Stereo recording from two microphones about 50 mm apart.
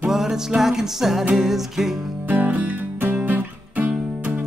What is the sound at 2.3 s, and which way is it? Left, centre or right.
Music, right.